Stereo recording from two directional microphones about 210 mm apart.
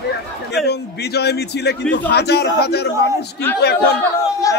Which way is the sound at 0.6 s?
50° left (ahead or behind).